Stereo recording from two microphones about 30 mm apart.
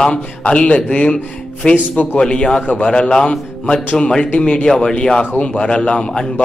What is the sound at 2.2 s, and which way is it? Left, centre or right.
Speech, left.